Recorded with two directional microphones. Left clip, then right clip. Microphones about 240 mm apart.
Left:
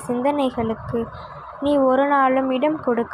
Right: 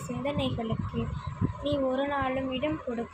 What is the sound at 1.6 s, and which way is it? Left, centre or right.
A woman's voice, left.